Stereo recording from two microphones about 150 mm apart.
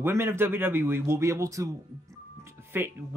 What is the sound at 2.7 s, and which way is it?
Speech, 15° right (ahead or behind).